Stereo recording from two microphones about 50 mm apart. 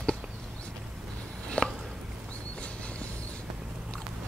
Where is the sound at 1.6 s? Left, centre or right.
Left.